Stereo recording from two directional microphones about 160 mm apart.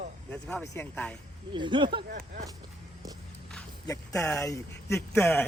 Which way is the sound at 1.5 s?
30° right (ahead or behind).